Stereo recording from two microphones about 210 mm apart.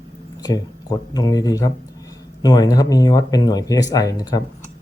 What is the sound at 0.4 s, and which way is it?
Speech, 20° left (ahead or behind).